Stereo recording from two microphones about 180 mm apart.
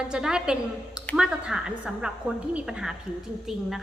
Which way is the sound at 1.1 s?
5° right (ahead or behind).